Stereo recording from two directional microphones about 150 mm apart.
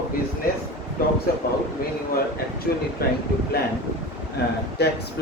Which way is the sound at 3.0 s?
80° left.